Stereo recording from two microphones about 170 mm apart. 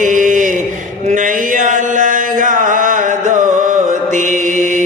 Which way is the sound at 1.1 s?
50° right (ahead or behind).